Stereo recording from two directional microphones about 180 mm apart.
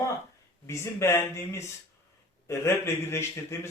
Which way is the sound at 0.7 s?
15° left (ahead or behind).